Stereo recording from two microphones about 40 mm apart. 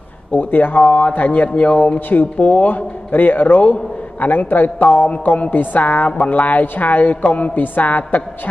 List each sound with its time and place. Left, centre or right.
0.3 s a woman's voice: left
2.0 s speech: left
2.3 s speech: left
2.6 s a woman's voice: left